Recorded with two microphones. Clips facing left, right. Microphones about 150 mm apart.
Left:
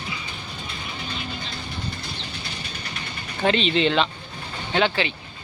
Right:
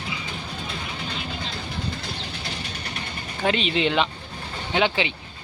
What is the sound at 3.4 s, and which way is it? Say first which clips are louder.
Speech: left 2 dB; 10° right (ahead or behind).